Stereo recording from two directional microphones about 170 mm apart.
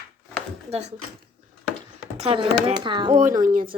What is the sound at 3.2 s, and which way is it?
Speech, 50° right (ahead or behind).